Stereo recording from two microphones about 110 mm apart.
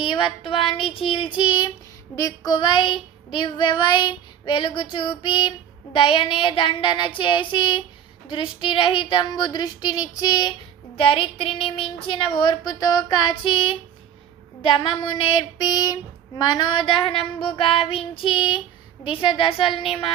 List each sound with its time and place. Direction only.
0.0 s child singing: 50° left (ahead or behind)
10.9 s child singing: 55° left (ahead or behind)
19.0 s a woman's voice: 50° left (ahead or behind)